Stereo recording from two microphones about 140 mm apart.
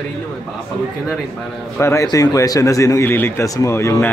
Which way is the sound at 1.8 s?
20° left (ahead or behind).